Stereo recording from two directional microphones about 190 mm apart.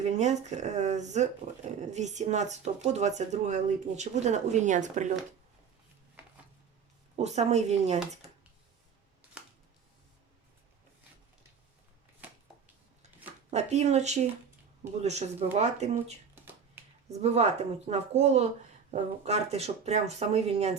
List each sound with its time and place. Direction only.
0.0 s speech: 35° right (ahead or behind)
7.2 s speech: 35° right (ahead or behind)
13.5 s speech: 35° right (ahead or behind)